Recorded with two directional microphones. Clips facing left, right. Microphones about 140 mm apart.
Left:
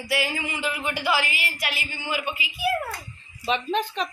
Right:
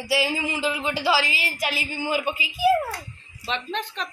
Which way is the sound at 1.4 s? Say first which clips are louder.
Right 3 dB; 40° right (ahead or behind).